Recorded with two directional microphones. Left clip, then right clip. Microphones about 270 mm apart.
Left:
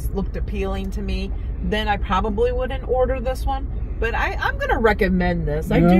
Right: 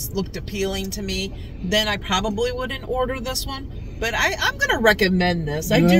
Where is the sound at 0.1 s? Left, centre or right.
Right.